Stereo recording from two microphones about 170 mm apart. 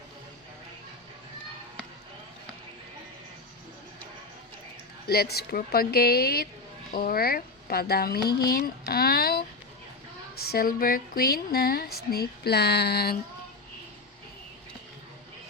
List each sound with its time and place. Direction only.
5.0 s speech: 70° left (ahead or behind)
10.5 s speech: 60° left (ahead or behind)